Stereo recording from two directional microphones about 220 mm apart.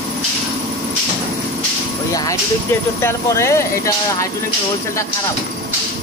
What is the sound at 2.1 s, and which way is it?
Music, 15° left (ahead or behind).